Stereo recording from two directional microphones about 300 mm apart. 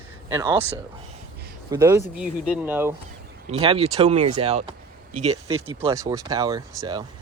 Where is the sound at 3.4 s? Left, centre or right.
Centre.